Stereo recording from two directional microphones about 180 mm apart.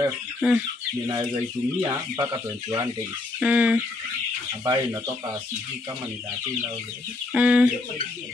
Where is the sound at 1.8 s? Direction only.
25° right (ahead or behind).